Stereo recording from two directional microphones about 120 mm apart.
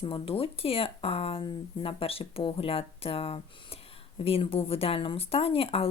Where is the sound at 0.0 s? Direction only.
50° left (ahead or behind).